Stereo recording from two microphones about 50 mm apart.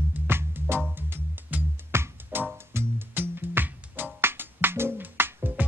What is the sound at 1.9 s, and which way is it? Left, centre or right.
Music, right.